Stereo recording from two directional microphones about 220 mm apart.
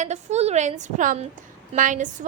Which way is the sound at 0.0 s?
30° right (ahead or behind).